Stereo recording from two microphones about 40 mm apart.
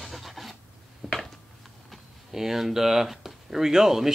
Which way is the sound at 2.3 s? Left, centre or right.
Centre.